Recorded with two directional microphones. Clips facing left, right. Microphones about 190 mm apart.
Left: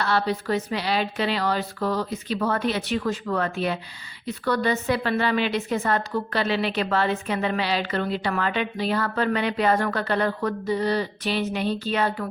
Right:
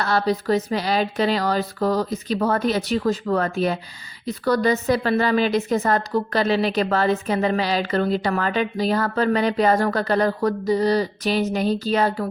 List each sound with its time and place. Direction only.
0.0 s a woman's voice: 40° right (ahead or behind)